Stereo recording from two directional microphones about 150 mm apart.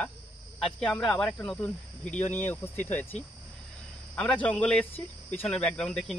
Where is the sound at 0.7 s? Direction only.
5° left (ahead or behind).